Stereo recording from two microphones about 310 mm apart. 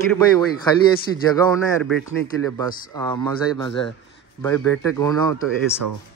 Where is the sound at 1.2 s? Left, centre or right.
Centre.